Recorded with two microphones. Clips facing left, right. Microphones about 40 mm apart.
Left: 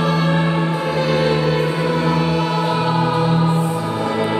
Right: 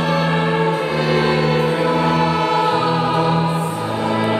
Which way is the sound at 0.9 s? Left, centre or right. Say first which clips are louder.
Even; centre.